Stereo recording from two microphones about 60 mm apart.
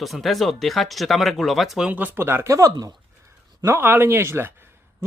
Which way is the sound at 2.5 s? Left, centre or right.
Right.